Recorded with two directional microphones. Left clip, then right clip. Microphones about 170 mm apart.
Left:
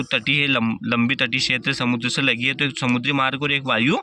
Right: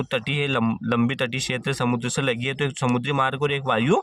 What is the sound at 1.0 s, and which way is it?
A man's voice, 55° right (ahead or behind).